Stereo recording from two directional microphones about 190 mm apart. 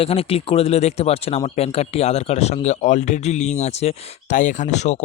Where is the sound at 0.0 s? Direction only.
30° left (ahead or behind).